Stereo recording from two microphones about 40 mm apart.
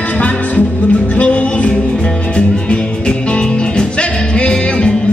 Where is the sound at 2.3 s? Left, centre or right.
Left.